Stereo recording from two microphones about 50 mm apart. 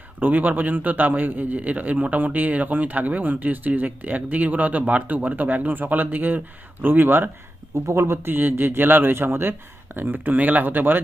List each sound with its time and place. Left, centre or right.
0.2 s a man's voice: right
7.9 s a man's voice: right